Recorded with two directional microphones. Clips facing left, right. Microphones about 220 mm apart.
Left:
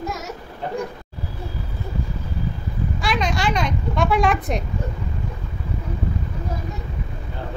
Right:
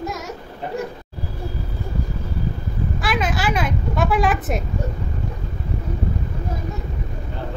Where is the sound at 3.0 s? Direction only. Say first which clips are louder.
Even; 5° right (ahead or behind).